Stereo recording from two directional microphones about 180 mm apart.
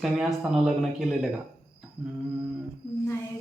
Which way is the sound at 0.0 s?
Centre (ahead or behind).